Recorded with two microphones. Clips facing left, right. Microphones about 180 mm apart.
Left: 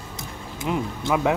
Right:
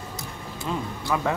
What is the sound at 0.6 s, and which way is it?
Speech, 15° left (ahead or behind).